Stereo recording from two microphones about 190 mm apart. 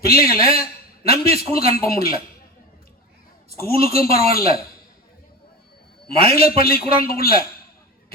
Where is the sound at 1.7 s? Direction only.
50° left (ahead or behind).